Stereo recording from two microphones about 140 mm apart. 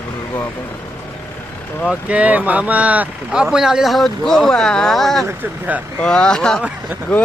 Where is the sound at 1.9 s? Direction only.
10° right (ahead or behind).